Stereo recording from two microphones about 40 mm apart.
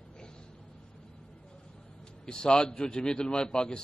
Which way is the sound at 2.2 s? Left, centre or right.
Centre.